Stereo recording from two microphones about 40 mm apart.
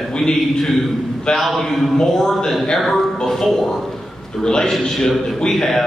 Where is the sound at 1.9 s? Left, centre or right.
Centre.